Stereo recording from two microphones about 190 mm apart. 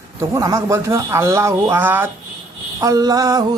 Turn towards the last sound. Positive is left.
turn(degrees=-20)  # may be behind; listen again after turning